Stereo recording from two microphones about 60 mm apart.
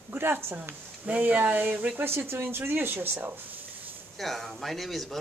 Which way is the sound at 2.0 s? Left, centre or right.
Right.